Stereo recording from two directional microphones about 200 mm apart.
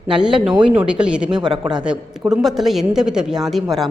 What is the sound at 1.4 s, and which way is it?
Speech, 20° right (ahead or behind).